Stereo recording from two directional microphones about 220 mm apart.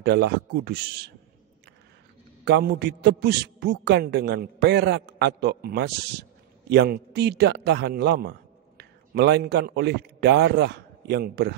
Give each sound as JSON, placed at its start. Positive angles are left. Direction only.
{"t": 0.0, "sound": "a man's voice", "side_deg": -50}
{"t": 2.4, "sound": "a man's voice", "side_deg": -45}